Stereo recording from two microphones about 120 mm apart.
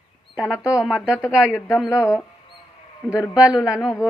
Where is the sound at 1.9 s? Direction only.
25° left (ahead or behind).